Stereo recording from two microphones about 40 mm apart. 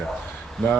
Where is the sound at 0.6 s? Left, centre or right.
Centre.